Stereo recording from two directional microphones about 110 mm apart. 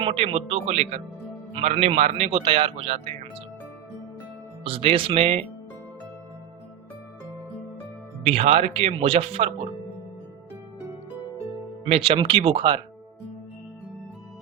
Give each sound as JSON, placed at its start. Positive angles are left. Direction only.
{"t": 0.0, "sound": "a man's voice", "side_deg": -55}
{"t": 4.6, "sound": "a man's voice", "side_deg": -60}
{"t": 8.2, "sound": "speech", "side_deg": -70}
{"t": 11.9, "sound": "a man's voice", "side_deg": -60}